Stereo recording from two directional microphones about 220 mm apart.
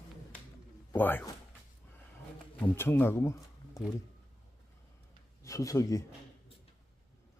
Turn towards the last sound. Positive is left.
turn(degrees=15)  # may be behind; listen again after turning